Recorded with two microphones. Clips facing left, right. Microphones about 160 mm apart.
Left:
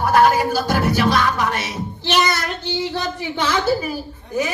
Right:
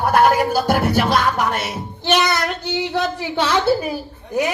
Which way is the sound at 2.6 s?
70° right (ahead or behind).